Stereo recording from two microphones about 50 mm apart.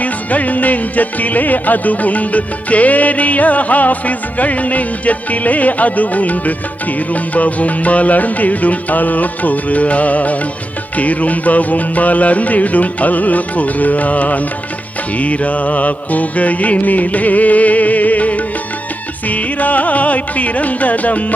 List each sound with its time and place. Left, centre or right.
0.0 s music: left